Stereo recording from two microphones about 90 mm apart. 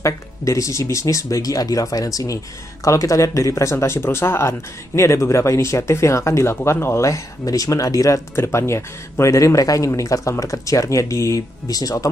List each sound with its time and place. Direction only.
0.0 s speech: 35° left (ahead or behind)